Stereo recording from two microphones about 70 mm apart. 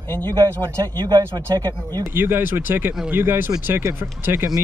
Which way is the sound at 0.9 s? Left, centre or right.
Right.